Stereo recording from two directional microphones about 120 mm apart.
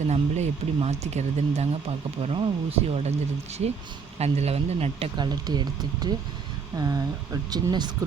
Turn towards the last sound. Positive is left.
turn(degrees=-35)  # may be behind; listen again after turning